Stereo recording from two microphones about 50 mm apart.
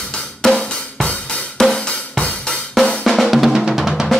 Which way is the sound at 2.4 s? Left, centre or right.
Centre.